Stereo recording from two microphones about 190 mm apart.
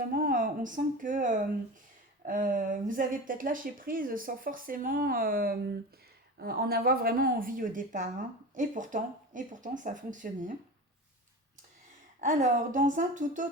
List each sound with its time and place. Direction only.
0.1 s a woman's voice: 45° right (ahead or behind)
12.2 s speech: 45° right (ahead or behind)